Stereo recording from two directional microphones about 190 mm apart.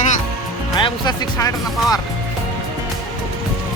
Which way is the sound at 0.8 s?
25° left (ahead or behind).